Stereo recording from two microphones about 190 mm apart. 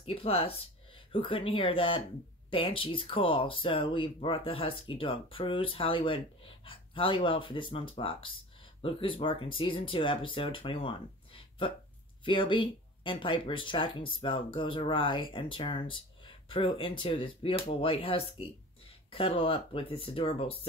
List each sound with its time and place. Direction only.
0.0 s speech: 30° left (ahead or behind)